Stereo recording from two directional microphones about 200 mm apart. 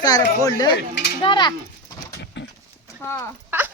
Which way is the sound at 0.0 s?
20° left (ahead or behind).